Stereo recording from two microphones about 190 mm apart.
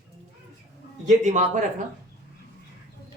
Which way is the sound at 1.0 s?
40° right (ahead or behind).